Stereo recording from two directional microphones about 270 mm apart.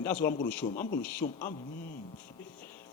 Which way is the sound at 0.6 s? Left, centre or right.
Left.